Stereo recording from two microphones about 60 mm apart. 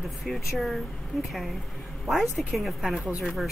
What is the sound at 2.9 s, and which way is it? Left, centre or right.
Speech, right.